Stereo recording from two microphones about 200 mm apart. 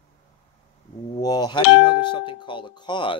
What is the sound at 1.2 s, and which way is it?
Speech, 20° left (ahead or behind).